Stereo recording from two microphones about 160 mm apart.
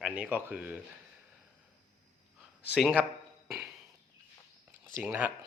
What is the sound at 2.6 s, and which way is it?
Speech, 5° right (ahead or behind).